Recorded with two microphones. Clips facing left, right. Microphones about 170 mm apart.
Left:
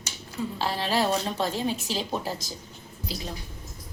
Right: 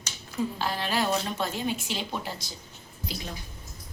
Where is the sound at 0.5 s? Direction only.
30° left (ahead or behind).